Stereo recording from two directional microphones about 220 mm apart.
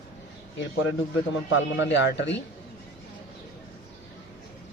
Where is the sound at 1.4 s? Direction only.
55° left (ahead or behind).